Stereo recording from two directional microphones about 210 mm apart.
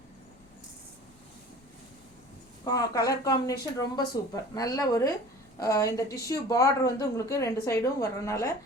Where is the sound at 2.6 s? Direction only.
15° left (ahead or behind).